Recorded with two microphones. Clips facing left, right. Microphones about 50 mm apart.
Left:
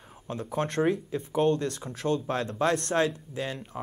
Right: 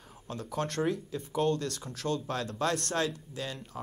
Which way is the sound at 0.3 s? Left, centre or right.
Left.